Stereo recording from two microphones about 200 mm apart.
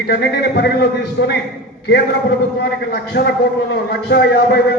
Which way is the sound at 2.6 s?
50° left (ahead or behind).